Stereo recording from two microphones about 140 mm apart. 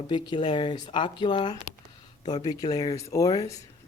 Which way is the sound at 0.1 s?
35° left (ahead or behind).